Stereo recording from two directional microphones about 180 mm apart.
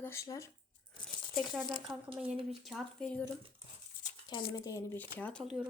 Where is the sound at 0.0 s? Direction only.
15° left (ahead or behind).